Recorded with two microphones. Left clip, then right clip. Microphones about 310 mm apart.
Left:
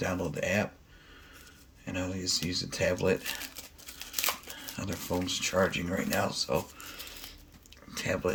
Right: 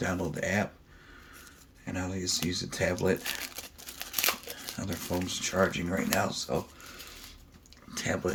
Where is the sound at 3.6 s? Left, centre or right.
Centre.